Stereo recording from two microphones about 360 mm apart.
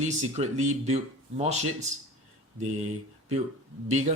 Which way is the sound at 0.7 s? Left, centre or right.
Centre.